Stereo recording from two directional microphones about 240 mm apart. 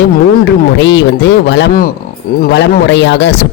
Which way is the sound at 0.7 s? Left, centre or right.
Left.